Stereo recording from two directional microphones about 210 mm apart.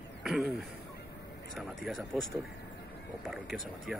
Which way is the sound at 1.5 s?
Centre (ahead or behind).